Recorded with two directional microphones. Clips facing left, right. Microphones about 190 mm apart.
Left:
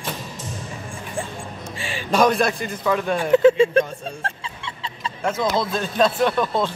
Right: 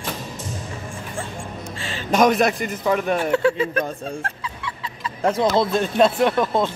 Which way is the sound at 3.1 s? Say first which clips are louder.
Left 5 dB; 20° left (ahead or behind).